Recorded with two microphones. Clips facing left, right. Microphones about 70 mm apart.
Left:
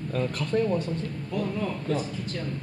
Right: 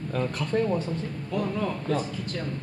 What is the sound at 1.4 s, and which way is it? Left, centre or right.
Speech, right.